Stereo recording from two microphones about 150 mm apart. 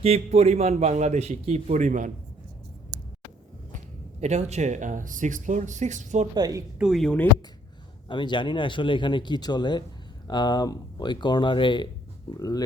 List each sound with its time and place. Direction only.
0.0 s a man's voice: 45° right (ahead or behind)
4.2 s a man's voice: 50° right (ahead or behind)
6.3 s speech: 25° right (ahead or behind)
6.7 s speech: centre (ahead or behind)
8.0 s speech: 30° left (ahead or behind)